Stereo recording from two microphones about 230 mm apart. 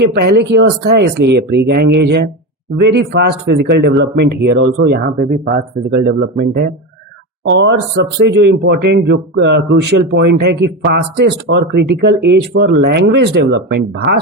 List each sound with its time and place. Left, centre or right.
0.0 s speech: right